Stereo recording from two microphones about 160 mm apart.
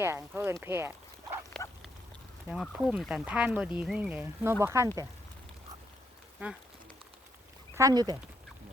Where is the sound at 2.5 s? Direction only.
5° right (ahead or behind).